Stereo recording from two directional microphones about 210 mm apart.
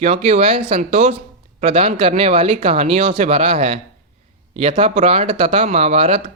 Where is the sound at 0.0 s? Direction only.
30° right (ahead or behind).